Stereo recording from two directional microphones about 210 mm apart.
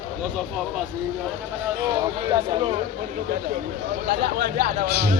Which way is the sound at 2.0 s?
20° right (ahead or behind).